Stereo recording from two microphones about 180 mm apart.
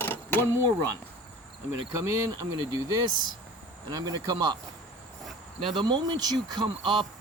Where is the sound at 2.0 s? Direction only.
15° right (ahead or behind).